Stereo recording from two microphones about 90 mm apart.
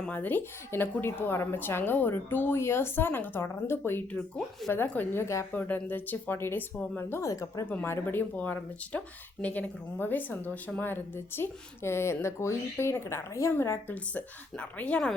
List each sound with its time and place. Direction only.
0.0 s speech: 20° left (ahead or behind)
5.5 s speech: 20° left (ahead or behind)
7.2 s speech: 40° left (ahead or behind)
7.7 s a woman's voice: 20° left (ahead or behind)